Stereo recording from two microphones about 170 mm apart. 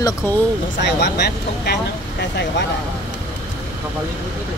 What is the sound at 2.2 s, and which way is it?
Speech, 90° left.